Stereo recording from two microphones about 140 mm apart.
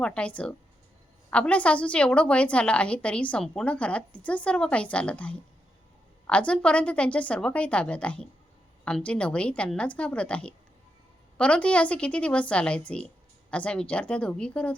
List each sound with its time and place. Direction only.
0.0 s a woman's voice: 10° left (ahead or behind)